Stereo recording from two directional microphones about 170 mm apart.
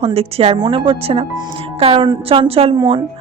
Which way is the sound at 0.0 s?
35° right (ahead or behind).